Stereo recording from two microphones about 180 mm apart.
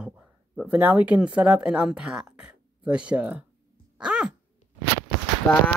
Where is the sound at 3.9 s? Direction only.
5° right (ahead or behind).